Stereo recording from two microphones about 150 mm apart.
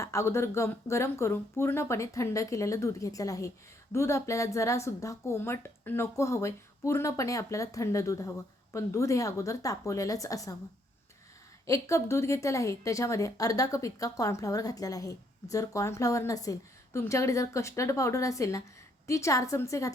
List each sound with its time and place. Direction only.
0.0 s a woman's voice: 20° left (ahead or behind)
11.6 s a woman's voice: 20° left (ahead or behind)